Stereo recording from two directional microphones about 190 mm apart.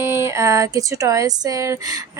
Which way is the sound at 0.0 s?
15° right (ahead or behind).